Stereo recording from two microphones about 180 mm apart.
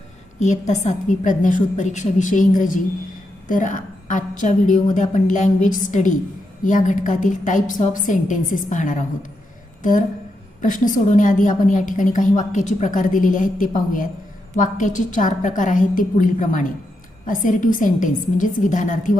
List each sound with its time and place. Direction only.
0.3 s a woman's voice: 40° left (ahead or behind)
10.6 s a woman's voice: 45° left (ahead or behind)